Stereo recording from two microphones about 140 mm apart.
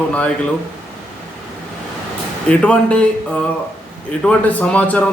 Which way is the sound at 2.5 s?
10° left (ahead or behind).